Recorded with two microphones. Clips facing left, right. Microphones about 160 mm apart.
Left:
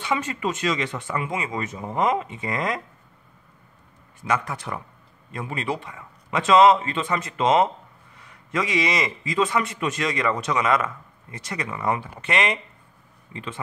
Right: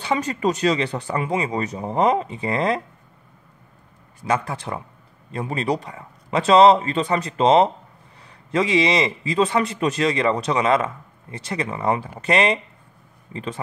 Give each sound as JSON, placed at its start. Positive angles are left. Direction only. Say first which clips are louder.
{"t": 0.0, "sound": "a man's voice", "louder": "right 4 dB", "side_deg": -35}
{"t": 4.2, "sound": "a man's voice", "louder": "right 3 dB", "side_deg": -30}